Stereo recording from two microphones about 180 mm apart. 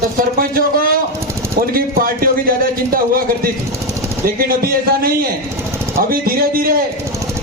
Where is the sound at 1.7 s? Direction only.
55° right (ahead or behind).